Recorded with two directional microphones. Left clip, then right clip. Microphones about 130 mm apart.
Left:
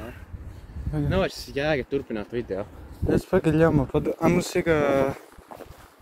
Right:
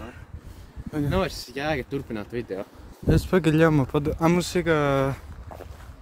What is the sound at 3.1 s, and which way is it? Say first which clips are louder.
Speech: even; 60° right (ahead or behind).